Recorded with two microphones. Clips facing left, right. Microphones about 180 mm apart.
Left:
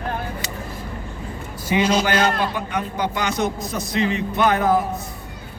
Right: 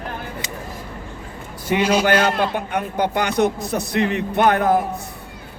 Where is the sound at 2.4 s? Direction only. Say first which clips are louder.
Right 2 dB; 55° right (ahead or behind).